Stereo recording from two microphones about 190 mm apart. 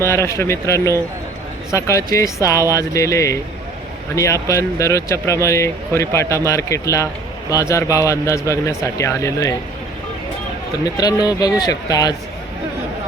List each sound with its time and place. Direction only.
0.0 s speech: 15° left (ahead or behind)
1.7 s speech: 15° left (ahead or behind)
10.8 s speech: 20° left (ahead or behind)